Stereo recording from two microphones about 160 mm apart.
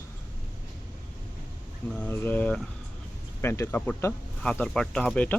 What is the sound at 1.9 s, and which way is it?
Speech, 10° left (ahead or behind).